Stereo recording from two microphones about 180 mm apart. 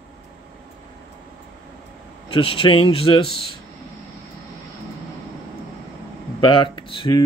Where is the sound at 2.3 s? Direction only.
30° left (ahead or behind).